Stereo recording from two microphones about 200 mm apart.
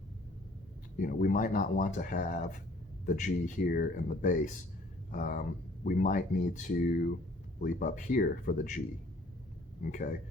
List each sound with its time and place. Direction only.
0.9 s speech: 40° left (ahead or behind)
9.8 s speech: 45° left (ahead or behind)